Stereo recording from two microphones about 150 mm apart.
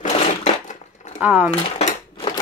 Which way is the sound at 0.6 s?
50° left (ahead or behind).